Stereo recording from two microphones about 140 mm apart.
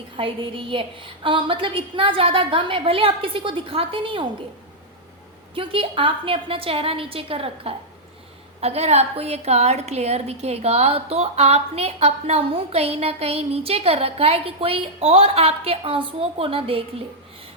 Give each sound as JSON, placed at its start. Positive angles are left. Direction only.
{"t": 0.2, "sound": "a woman's voice", "side_deg": -40}
{"t": 5.5, "sound": "a woman's voice", "side_deg": -40}